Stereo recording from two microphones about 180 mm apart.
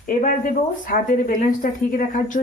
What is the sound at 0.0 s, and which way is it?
Speech, 50° left (ahead or behind).